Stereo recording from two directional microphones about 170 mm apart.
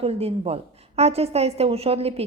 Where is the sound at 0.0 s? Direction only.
35° right (ahead or behind).